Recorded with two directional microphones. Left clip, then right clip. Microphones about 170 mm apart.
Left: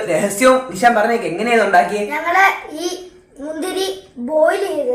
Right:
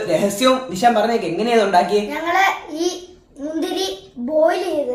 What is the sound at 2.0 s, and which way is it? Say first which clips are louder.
A child's voice: left 3 dB; 10° left (ahead or behind).